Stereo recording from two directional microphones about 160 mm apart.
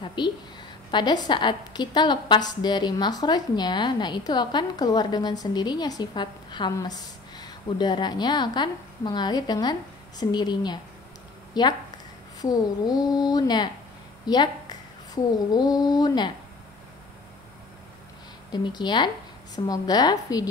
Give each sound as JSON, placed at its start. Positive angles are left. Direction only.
{"t": 0.0, "sound": "a woman's voice", "side_deg": 30}
{"t": 18.5, "sound": "a woman's voice", "side_deg": 25}